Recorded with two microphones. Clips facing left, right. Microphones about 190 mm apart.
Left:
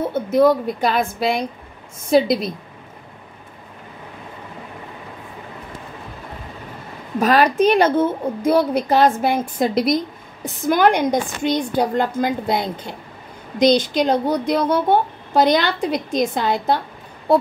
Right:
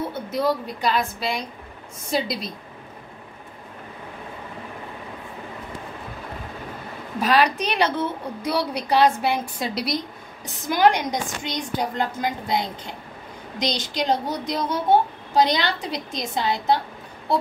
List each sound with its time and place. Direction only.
0.3 s a woman's voice: 50° left (ahead or behind)
7.2 s a woman's voice: 45° left (ahead or behind)